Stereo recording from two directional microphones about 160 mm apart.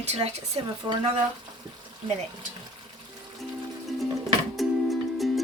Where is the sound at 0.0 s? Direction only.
40° right (ahead or behind).